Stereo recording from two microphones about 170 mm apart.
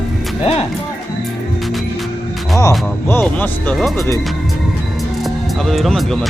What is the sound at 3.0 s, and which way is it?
Speech, 10° left (ahead or behind).